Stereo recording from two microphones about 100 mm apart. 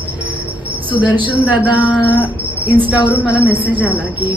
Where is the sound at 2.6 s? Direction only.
15° right (ahead or behind).